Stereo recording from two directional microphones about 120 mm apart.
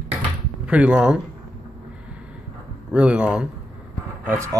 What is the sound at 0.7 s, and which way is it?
Speech, 10° right (ahead or behind).